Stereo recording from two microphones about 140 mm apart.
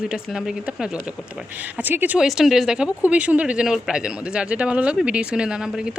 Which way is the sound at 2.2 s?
Centre (ahead or behind).